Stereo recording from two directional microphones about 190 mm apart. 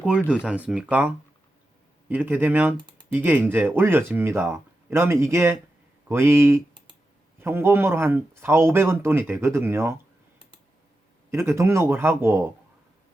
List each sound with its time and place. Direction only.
0.0 s speech: 5° right (ahead or behind)
11.3 s speech: 15° right (ahead or behind)